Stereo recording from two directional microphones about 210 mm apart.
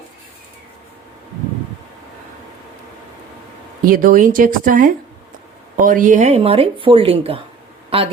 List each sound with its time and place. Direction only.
3.8 s speech: 40° right (ahead or behind); by 7.3 s 25° right (ahead or behind)